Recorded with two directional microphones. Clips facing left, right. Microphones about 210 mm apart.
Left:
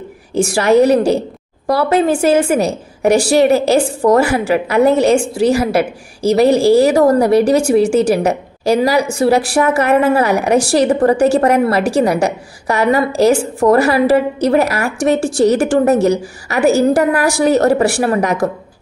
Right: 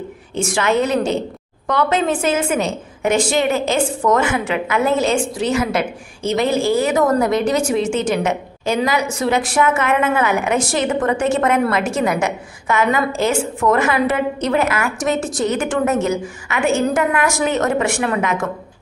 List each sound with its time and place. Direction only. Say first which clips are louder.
0.4 s a woman's voice: left 7 dB; 35° left (ahead or behind)